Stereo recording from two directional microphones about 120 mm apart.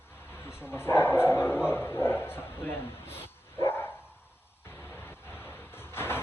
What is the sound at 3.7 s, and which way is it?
Dog, 20° left (ahead or behind).